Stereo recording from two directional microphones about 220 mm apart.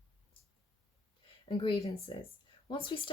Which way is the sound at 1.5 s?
20° left (ahead or behind).